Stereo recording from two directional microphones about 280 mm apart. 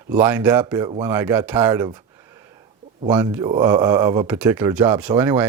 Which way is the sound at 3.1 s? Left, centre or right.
Centre.